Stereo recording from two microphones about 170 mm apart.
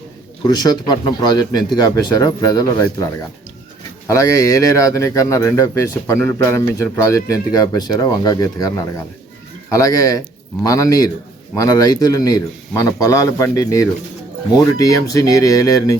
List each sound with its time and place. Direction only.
0.4 s speech: 25° left (ahead or behind)
4.0 s speech: 15° left (ahead or behind)